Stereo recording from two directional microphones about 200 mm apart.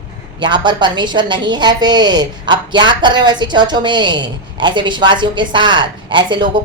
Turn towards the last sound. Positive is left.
turn(degrees=-25)  # may be behind; listen again after turning